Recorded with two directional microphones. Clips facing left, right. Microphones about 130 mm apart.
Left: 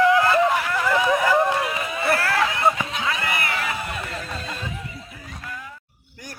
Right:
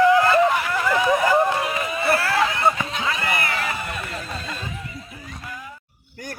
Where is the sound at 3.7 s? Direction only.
20° left (ahead or behind).